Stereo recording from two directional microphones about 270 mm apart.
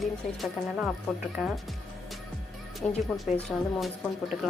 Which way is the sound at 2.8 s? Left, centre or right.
Centre.